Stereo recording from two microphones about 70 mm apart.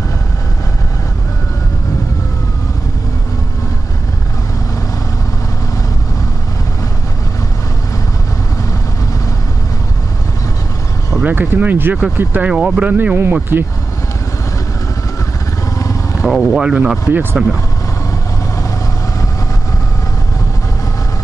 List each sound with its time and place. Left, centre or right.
11.2 s speech: right
12.4 s speech: centre
12.8 s speech: right
16.3 s speech: centre
17.1 s speech: right